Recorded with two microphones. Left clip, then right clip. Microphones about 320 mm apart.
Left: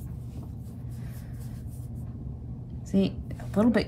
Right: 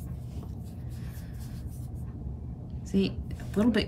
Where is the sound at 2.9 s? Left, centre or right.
Centre.